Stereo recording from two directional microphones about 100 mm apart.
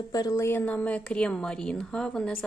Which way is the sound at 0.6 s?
15° left (ahead or behind).